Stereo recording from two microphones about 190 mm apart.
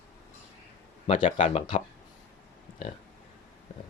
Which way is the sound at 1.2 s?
40° left (ahead or behind).